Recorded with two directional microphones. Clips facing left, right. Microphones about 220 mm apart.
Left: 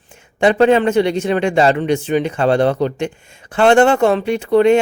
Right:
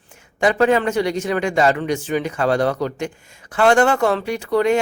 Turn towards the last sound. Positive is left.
turn(degrees=25)  # may be behind; listen again after turning